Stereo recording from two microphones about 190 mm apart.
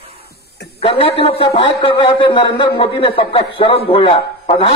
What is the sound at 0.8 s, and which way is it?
A man's voice, 30° left (ahead or behind).